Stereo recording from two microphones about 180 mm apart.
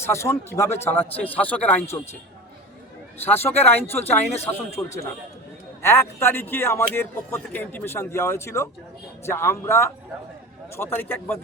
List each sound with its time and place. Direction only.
0.0 s speech: 15° left (ahead or behind)
3.2 s speech: 15° left (ahead or behind)
4.0 s speech: 35° left (ahead or behind)
4.7 s speech: 15° left (ahead or behind)